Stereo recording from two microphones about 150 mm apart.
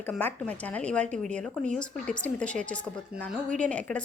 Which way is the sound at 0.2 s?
10° left (ahead or behind).